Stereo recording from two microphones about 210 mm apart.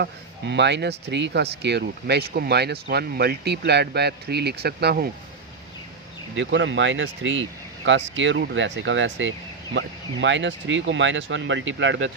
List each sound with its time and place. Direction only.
0.0 s speech: 55° right (ahead or behind)
6.3 s speech: 60° right (ahead or behind)